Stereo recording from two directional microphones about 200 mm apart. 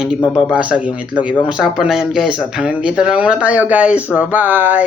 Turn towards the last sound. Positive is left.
turn(degrees=-10)  # may be behind; listen again after turning